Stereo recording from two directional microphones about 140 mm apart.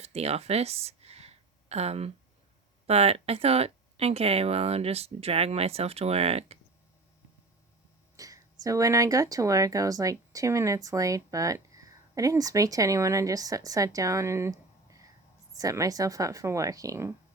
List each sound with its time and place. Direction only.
0.0 s a sound: 50° right (ahead or behind)
2.8 s speech: 45° right (ahead or behind)
8.1 s speech: 25° right (ahead or behind)